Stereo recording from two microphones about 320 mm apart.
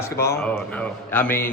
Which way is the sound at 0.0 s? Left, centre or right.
Centre.